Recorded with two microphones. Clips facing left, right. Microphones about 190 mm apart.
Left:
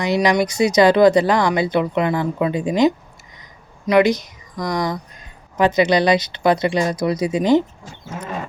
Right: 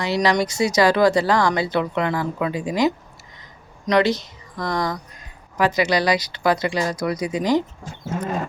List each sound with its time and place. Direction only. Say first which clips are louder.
0.0 s speech: left 3 dB; 15° left (ahead or behind)